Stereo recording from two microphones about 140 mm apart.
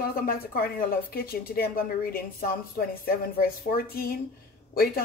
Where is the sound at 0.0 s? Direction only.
90° left.